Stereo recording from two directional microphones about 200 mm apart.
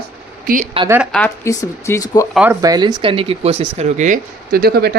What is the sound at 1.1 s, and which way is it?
Speech, 10° left (ahead or behind).